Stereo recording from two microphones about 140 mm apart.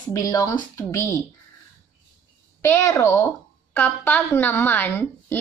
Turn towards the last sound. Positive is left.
turn(degrees=15)  # may be behind; listen again after turning